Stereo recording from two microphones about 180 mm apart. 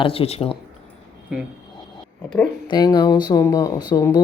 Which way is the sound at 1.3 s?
5° right (ahead or behind).